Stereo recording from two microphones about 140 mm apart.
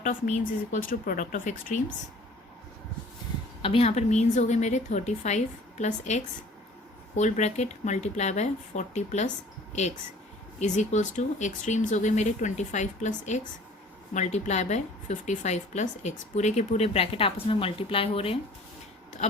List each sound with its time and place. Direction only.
0.0 s speech: 65° left (ahead or behind)
3.6 s speech: 45° left (ahead or behind)
10.6 s a woman's voice: 55° left (ahead or behind)
19.2 s a sound: 55° left (ahead or behind)